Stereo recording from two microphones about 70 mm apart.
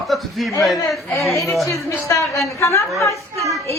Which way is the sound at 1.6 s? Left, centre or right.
Left.